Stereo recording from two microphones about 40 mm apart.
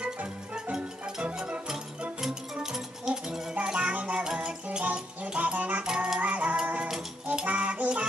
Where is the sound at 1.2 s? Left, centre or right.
Right.